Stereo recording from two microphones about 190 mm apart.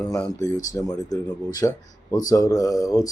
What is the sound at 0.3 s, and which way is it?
Speech, 20° left (ahead or behind).